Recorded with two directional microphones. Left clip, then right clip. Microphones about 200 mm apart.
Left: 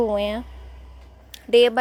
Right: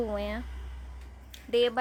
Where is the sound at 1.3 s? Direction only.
35° left (ahead or behind).